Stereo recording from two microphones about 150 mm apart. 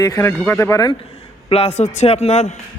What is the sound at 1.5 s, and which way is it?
Speech, 45° left (ahead or behind).